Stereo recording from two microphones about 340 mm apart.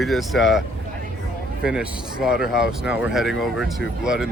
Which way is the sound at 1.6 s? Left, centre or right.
Centre.